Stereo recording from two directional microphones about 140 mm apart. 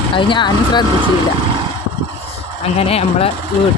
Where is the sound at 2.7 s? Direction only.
45° left (ahead or behind).